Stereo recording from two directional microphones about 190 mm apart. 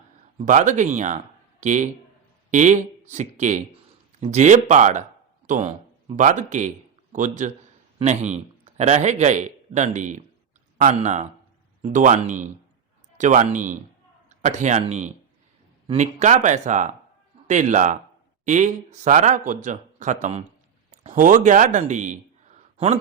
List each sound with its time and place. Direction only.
0.3 s a man's voice: 40° right (ahead or behind)